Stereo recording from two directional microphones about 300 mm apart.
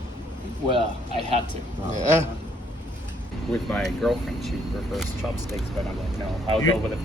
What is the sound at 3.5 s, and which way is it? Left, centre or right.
Speech, centre.